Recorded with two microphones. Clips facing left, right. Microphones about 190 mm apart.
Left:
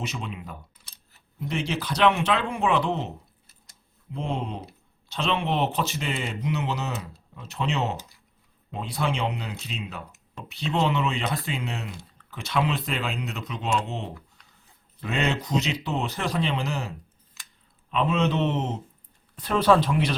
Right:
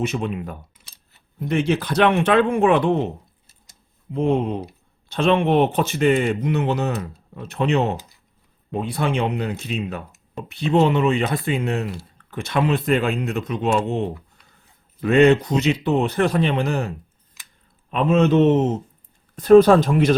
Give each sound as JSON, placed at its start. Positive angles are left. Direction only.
{"t": 0.0, "sound": "speech", "side_deg": -55}
{"t": 4.1, "sound": "speech", "side_deg": -55}
{"t": 17.9, "sound": "speech", "side_deg": -45}